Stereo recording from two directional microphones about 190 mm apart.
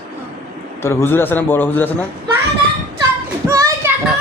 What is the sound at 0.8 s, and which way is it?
A man's voice, 10° left (ahead or behind).